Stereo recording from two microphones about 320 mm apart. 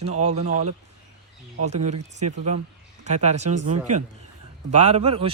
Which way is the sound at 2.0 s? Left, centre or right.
Right.